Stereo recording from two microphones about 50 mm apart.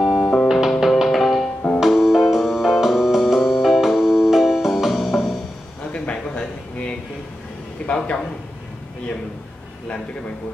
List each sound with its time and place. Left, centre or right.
0.0 s music: centre
0.7 s music: centre
1.0 s music: centre
5.9 s a sound: left